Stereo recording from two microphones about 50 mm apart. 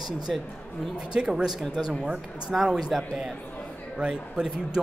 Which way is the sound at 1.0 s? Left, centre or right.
Centre.